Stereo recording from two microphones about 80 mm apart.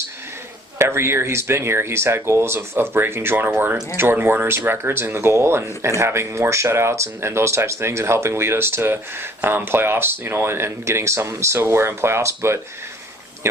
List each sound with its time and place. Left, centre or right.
0.8 s speech: right